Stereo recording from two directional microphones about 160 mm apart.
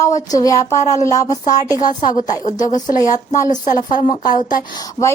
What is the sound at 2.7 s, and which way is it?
Speech, 50° left (ahead or behind).